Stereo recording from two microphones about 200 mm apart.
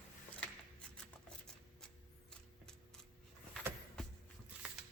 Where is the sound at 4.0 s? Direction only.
5° left (ahead or behind).